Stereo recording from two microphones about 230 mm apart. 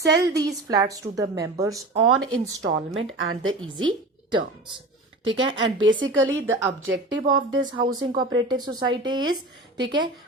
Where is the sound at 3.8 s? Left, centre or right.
Centre.